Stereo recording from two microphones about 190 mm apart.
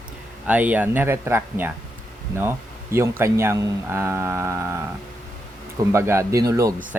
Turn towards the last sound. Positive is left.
turn(degrees=-15)  # may be behind; listen again after turning